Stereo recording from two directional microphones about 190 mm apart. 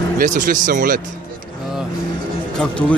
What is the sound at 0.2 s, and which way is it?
Speech, 45° right (ahead or behind).